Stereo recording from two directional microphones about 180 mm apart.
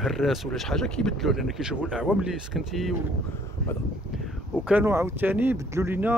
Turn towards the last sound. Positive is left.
turn(degrees=-10)  # may be behind; listen again after turning